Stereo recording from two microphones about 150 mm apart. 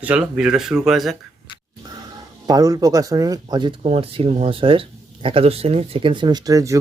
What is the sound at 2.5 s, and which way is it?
Speech, 25° right (ahead or behind).